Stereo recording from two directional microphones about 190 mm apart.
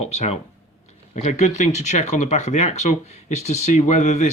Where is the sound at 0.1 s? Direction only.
35° left (ahead or behind).